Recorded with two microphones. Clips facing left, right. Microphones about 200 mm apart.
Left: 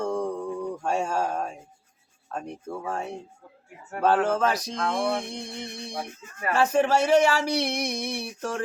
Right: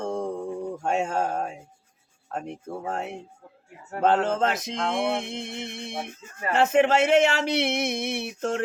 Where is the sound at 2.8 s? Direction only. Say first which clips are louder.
Right 1 dB; 20° right (ahead or behind).